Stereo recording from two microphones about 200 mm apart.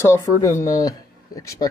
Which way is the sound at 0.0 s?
15° left (ahead or behind).